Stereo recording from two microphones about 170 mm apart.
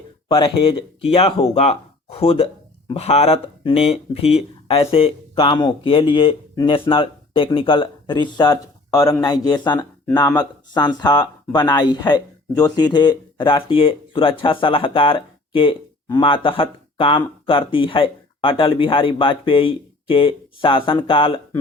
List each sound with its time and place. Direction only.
0.3 s speech: 30° left (ahead or behind)